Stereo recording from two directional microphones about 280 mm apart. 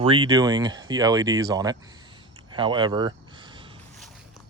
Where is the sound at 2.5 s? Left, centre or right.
Centre.